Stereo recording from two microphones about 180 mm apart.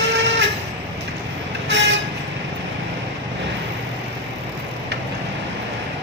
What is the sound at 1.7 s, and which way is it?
Vehicle, 85° right.